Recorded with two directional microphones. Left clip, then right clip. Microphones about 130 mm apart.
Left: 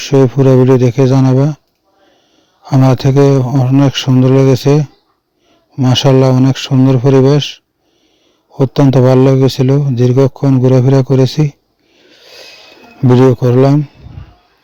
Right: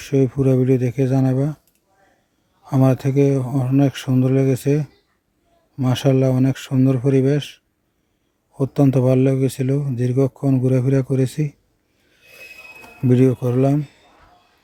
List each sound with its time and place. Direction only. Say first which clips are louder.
0.0 s a man's voice: left 9 dB; 55° left (ahead or behind)
2.6 s a man's voice: left 7 dB; 55° left (ahead or behind)
12.0 s a sound: left 6 dB; 60° left (ahead or behind)
13.1 s a man's voice: left 9 dB; 50° left (ahead or behind)